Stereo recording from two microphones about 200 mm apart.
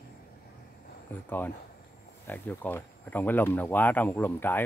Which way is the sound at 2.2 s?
10° left (ahead or behind).